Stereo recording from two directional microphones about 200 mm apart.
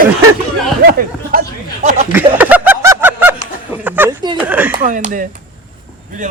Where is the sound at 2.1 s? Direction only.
10° right (ahead or behind).